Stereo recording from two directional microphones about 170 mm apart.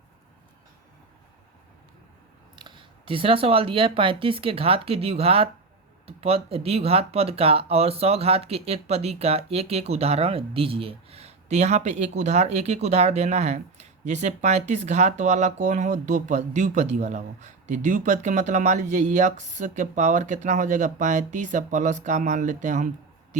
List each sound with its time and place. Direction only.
2.6 s speech: 30° right (ahead or behind); by 22.9 s 45° right (ahead or behind)